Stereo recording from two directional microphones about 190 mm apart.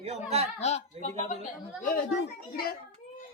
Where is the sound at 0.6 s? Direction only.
35° left (ahead or behind).